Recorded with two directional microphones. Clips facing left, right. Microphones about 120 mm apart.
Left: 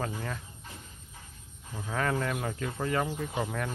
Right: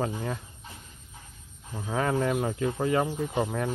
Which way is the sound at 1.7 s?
15° right (ahead or behind).